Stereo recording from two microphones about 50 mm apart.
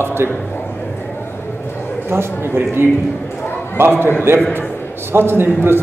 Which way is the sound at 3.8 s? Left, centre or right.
Right.